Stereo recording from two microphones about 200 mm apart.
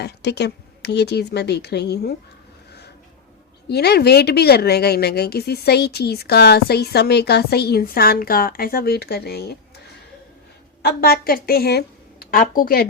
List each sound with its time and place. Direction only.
0.0 s speech: 55° left (ahead or behind)
3.7 s a woman's voice: 55° left (ahead or behind)